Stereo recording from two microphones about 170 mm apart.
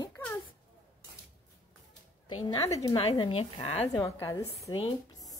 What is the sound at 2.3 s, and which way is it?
A woman's voice, 20° left (ahead or behind).